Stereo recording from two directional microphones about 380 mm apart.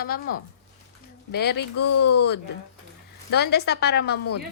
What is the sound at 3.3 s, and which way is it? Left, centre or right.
Speech, left.